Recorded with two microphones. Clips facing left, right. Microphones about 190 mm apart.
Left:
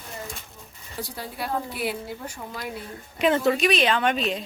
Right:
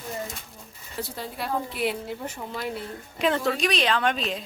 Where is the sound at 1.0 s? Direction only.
5° left (ahead or behind).